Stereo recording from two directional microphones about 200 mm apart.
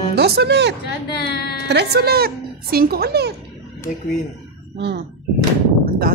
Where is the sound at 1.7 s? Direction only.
55° right (ahead or behind).